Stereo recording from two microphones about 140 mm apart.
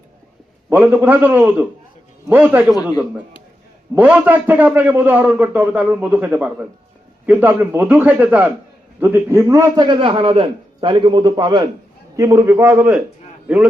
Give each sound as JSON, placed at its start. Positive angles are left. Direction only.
{"t": 0.7, "sound": "a man's voice", "side_deg": -10}
{"t": 3.9, "sound": "a man's voice", "side_deg": -10}